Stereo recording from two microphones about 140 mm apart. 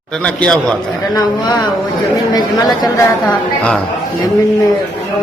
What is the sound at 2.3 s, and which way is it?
Speech, 25° left (ahead or behind).